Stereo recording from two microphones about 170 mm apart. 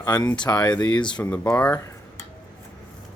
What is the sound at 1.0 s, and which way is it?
Speech, 5° left (ahead or behind).